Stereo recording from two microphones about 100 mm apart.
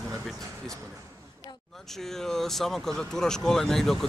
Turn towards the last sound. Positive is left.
turn(degrees=5)  # may be behind; listen again after turning